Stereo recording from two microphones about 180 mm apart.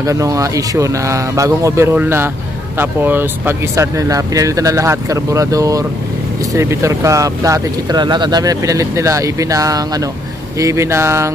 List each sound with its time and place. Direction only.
0.0 s speech: 20° right (ahead or behind)